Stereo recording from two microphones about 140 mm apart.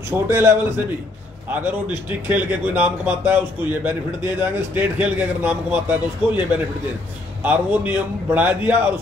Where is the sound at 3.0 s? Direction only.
15° right (ahead or behind).